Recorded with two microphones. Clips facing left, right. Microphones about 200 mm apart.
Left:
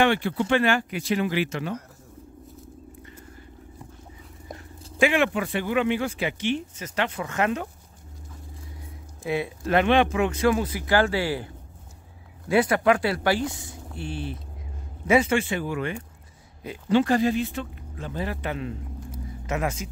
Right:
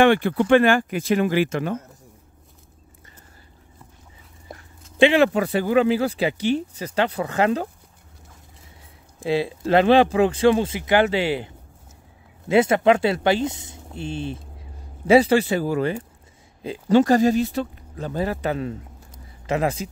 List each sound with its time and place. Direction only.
0.0 s speech: 55° right (ahead or behind)
4.9 s speech: 30° right (ahead or behind)
9.2 s speech: 30° right (ahead or behind)